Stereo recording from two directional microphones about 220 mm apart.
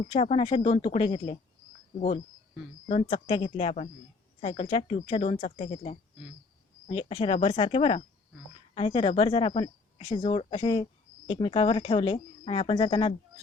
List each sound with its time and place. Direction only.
0.1 s speech: 25° left (ahead or behind)
2.9 s speech: 25° left (ahead or behind)